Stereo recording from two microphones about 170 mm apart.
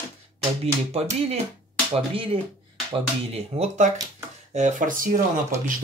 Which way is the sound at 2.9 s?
35° right (ahead or behind).